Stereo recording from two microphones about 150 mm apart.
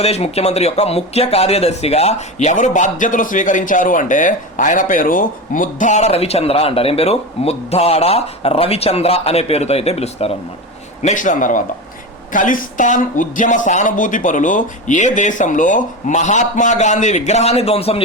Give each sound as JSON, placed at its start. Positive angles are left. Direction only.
{"t": 0.0, "sound": "speech", "side_deg": 45}
{"t": 11.0, "sound": "speech", "side_deg": 60}